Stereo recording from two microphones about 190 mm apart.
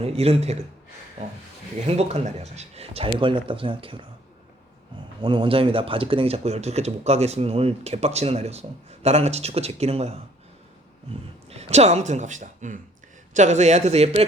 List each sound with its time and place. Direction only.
0.0 s speech: 30° right (ahead or behind)
1.9 s speech: 35° right (ahead or behind)
5.2 s speech: 25° right (ahead or behind)
11.5 s speech: 35° right (ahead or behind)